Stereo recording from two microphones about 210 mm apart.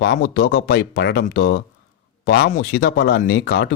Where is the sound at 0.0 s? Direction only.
50° left (ahead or behind).